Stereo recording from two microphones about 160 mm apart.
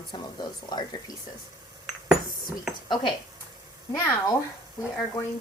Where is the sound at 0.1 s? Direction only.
30° left (ahead or behind).